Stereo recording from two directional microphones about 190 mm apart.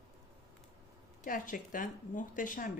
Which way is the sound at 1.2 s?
45° left (ahead or behind).